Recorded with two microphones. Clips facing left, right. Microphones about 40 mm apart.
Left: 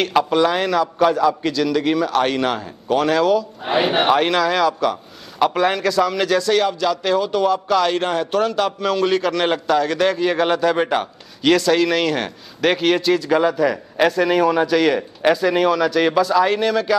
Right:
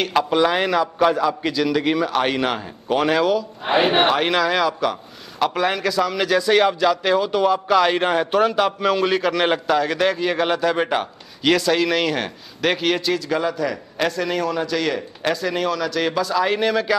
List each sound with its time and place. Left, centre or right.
0.0 s a man's voice: centre
3.6 s speech: right
4.1 s a man's voice: centre